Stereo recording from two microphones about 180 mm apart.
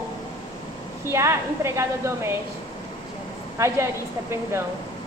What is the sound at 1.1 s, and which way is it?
A woman's voice, 15° right (ahead or behind).